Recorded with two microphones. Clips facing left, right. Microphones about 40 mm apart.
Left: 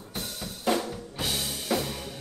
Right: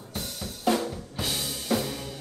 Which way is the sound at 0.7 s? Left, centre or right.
Centre.